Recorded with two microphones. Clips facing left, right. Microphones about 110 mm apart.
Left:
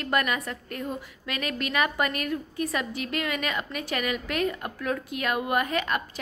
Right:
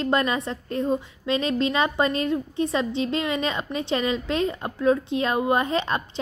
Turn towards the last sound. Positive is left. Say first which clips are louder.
# right 3 dB
turn(degrees=-25)  # may be behind; listen again after turning